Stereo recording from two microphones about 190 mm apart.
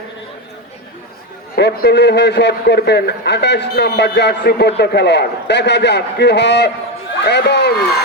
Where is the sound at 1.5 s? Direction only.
60° left (ahead or behind).